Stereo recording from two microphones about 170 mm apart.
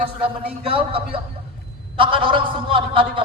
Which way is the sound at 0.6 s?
35° right (ahead or behind).